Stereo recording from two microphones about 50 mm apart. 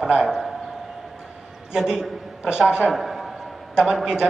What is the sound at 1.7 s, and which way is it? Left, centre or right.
A man's voice, centre.